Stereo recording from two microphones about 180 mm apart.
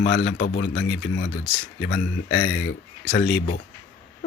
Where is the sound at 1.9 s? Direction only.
90° left.